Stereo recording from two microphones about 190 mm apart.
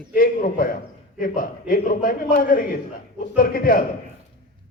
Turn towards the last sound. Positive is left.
turn(degrees=50)  # may be behind; listen again after turning